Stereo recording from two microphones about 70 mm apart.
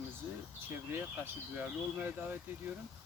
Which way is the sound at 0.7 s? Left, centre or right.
Right.